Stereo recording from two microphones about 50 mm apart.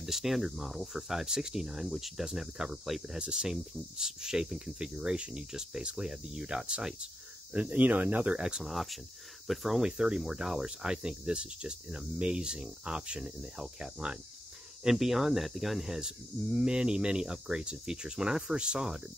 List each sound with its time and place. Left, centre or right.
0.0 s speech: centre
7.5 s speech: right
8.4 s speech: centre
8.6 s speech: centre
9.8 s speech: centre